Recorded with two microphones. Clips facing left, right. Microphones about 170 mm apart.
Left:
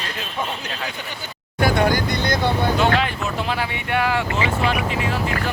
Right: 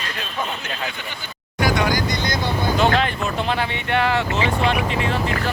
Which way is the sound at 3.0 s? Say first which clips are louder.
Right 1 dB; 10° left (ahead or behind).